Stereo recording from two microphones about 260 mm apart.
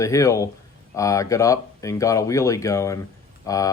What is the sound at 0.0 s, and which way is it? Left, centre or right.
Speech, centre.